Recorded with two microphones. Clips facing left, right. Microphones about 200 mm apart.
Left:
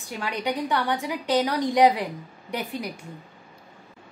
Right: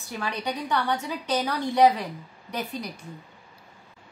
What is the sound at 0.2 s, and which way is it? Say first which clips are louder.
Speech: left 3 dB; 15° left (ahead or behind).